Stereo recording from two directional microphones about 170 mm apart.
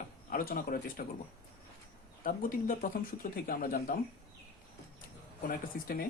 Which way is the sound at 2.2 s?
55° left (ahead or behind).